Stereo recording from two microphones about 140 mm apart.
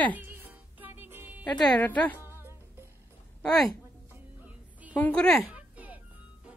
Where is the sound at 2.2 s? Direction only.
15° right (ahead or behind).